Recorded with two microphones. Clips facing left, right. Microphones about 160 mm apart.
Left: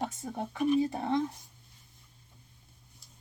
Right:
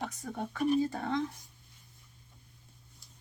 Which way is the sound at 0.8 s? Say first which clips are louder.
Left 2 dB; 20° left (ahead or behind).